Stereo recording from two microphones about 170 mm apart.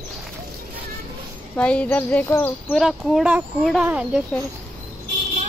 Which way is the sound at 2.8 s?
Centre (ahead or behind).